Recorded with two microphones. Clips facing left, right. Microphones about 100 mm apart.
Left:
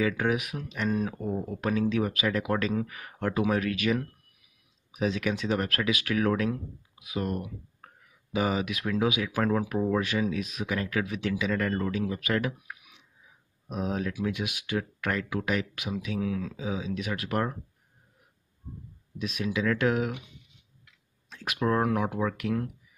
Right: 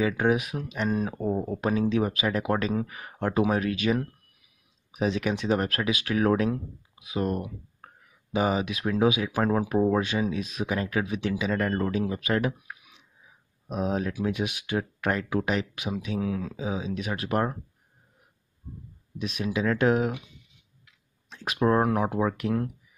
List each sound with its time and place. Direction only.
0.0 s speech: 25° right (ahead or behind)
7.8 s a sound: 30° right (ahead or behind)
8.3 s speech: 30° right (ahead or behind)
19.1 s speech: 25° right (ahead or behind)
21.3 s speech: 30° right (ahead or behind)